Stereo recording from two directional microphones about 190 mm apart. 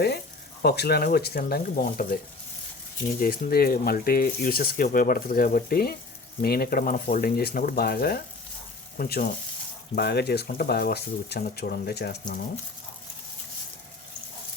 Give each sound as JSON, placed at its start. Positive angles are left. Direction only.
{"t": 0.6, "sound": "speech", "side_deg": 55}
{"t": 3.2, "sound": "speech", "side_deg": 50}